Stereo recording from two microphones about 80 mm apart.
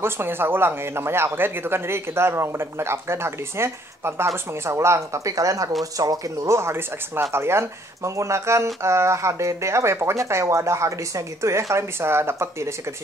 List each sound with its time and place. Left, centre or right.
0.0 s speech: right